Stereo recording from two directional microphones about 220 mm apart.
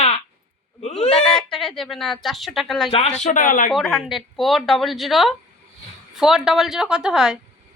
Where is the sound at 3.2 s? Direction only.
40° left (ahead or behind).